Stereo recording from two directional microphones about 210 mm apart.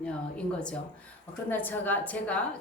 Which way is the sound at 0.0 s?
5° left (ahead or behind).